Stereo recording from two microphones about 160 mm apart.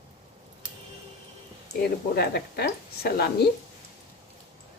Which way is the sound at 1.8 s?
85° left.